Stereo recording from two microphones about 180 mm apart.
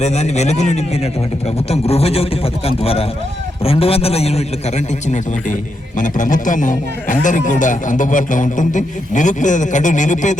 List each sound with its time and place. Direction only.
0.0 s a man's voice: 40° left (ahead or behind)